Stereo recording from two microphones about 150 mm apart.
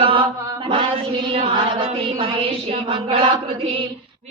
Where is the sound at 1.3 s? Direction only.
40° right (ahead or behind).